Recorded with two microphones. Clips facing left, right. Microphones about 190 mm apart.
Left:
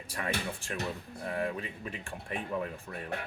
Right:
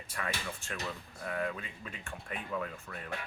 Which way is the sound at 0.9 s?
25° left (ahead or behind).